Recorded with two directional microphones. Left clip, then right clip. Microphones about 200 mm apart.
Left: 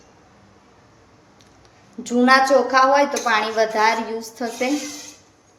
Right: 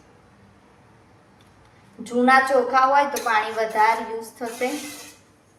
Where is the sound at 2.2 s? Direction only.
50° left (ahead or behind).